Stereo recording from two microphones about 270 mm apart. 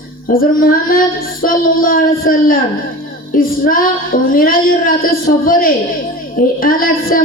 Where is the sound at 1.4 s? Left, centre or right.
Left.